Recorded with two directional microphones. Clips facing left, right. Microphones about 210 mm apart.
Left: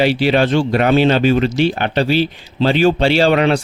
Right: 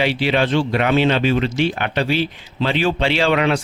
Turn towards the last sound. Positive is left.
turn(degrees=35)  # may be behind; listen again after turning